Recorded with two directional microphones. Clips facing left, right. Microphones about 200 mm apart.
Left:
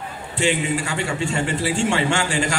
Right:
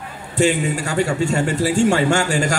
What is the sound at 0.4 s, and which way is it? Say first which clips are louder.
A man's voice: right 4 dB; 40° right (ahead or behind).